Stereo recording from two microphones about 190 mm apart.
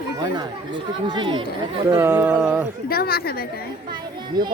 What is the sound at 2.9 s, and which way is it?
Speech, 55° left (ahead or behind).